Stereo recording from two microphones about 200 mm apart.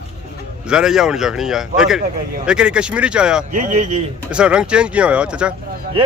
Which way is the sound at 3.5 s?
40° right (ahead or behind).